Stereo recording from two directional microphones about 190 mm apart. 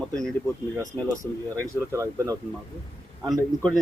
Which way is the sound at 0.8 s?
15° right (ahead or behind).